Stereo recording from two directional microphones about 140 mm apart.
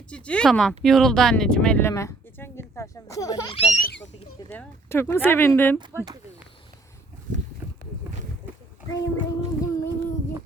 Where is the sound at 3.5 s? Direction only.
50° left (ahead or behind).